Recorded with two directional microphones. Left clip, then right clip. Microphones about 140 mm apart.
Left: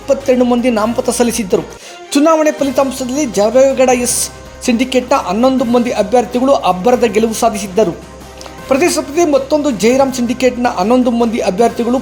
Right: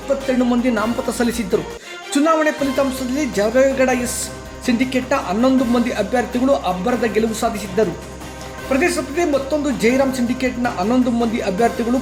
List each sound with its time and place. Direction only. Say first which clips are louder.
0.1 s a woman's voice: left 7 dB; 40° left (ahead or behind)